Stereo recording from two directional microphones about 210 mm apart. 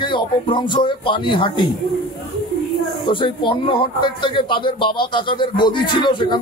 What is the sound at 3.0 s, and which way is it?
Speech, 25° left (ahead or behind).